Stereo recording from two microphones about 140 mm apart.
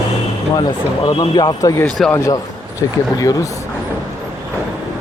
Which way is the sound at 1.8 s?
5° left (ahead or behind).